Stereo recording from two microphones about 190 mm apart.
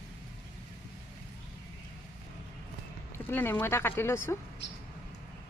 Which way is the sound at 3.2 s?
10° left (ahead or behind).